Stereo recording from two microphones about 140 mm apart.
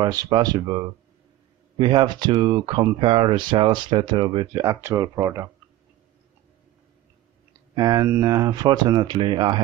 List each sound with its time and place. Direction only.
0.0 s speech: 30° right (ahead or behind)
7.7 s speech: 25° right (ahead or behind)